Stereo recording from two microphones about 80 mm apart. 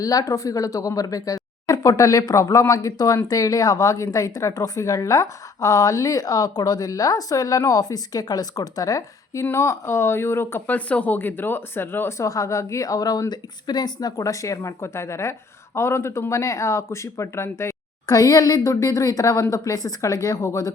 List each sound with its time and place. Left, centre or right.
0.0 s speech: left
9.4 s speech: left
10.7 s speech: centre; by 17.7 s left
18.0 s speech: left